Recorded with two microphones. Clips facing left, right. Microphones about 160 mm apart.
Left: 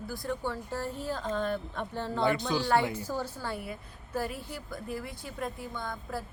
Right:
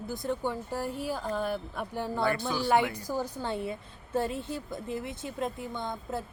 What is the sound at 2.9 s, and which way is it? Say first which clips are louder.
A woman's voice: right 1 dB; 15° right (ahead or behind).